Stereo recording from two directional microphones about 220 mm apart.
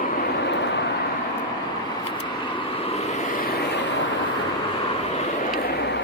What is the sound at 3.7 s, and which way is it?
Vehicle, 50° left (ahead or behind).